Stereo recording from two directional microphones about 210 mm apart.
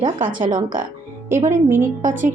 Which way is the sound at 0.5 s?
40° right (ahead or behind).